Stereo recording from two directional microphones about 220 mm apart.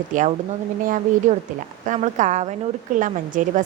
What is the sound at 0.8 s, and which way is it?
A woman's voice, 35° right (ahead or behind).